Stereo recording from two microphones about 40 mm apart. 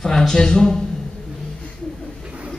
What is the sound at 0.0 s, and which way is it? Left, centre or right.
Speech, centre.